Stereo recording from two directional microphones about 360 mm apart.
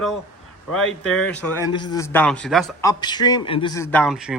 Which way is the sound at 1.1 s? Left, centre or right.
Centre.